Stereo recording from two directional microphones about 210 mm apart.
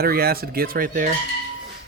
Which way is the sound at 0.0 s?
45° right (ahead or behind).